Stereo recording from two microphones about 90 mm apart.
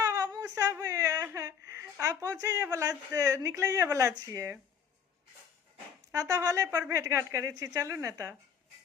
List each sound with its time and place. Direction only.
0.0 s whimper: 40° right (ahead or behind)
0.5 s a woman's voice: 30° right (ahead or behind)
6.1 s a woman's voice: 40° right (ahead or behind)